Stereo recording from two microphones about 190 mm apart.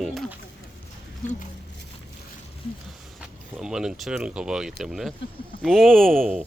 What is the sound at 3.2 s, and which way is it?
Speech, 5° right (ahead or behind).